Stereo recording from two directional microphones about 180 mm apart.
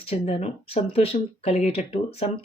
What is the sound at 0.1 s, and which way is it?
Speech, 35° left (ahead or behind).